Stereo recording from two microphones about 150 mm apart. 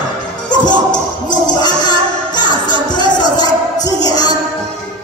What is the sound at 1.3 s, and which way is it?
Music, 30° left (ahead or behind).